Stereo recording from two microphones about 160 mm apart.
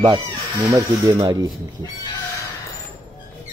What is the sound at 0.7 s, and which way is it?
Speech, 25° right (ahead or behind).